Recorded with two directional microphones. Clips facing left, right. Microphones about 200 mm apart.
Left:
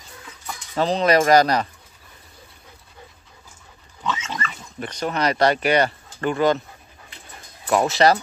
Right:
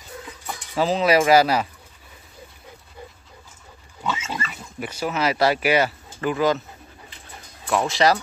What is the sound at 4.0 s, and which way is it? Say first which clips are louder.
Pig: even; 10° right (ahead or behind).